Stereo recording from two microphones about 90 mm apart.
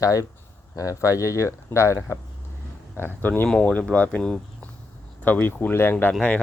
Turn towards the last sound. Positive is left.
turn(degrees=15)  # may be behind; listen again after turning